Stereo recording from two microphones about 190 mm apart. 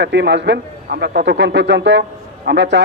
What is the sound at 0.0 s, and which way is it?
A man's voice, 65° right (ahead or behind).